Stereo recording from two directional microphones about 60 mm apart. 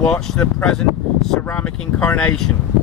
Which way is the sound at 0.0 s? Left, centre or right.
Centre.